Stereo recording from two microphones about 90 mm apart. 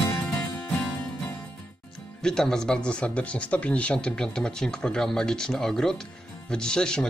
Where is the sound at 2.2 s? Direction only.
5° left (ahead or behind).